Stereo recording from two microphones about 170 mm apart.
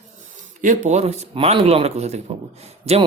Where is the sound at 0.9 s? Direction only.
40° right (ahead or behind).